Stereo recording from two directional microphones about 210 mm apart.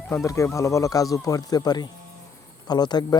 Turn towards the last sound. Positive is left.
turn(degrees=20)  # may be behind; listen again after turning